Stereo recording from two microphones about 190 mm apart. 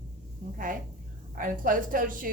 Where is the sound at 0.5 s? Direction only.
45° right (ahead or behind).